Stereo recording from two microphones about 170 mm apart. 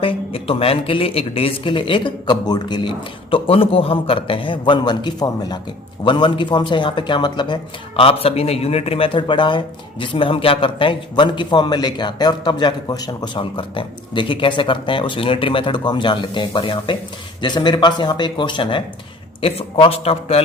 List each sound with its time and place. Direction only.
0.0 s speech: 30° left (ahead or behind)